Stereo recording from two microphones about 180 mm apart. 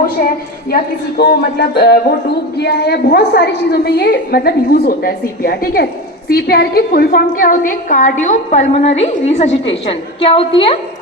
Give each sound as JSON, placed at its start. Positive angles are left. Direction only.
{"t": 0.2, "sound": "a woman's voice", "side_deg": 45}
{"t": 0.7, "sound": "a woman's voice", "side_deg": 60}